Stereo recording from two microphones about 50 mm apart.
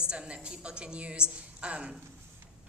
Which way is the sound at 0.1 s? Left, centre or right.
Centre.